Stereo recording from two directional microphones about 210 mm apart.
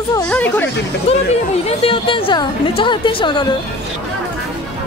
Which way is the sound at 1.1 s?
30° left (ahead or behind).